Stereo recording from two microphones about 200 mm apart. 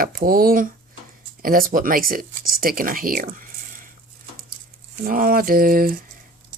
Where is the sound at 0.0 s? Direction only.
45° right (ahead or behind).